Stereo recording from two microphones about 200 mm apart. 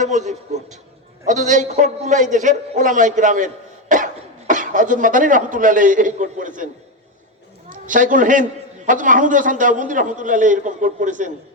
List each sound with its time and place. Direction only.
0.0 s a man's voice: 35° right (ahead or behind)
7.7 s a man's voice: 40° right (ahead or behind)